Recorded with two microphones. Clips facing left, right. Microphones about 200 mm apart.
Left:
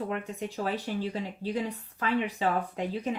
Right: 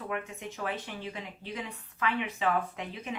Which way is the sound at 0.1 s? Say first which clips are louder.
Left 3 dB; 30° left (ahead or behind).